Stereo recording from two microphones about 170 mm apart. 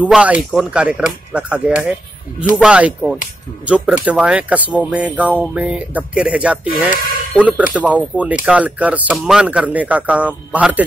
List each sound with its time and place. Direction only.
0.0 s speech: 5° right (ahead or behind)
2.6 s speech: 5° right (ahead or behind)